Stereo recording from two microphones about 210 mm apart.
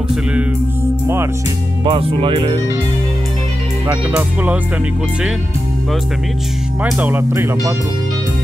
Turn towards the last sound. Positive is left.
turn(degrees=-15)  # may be behind; listen again after turning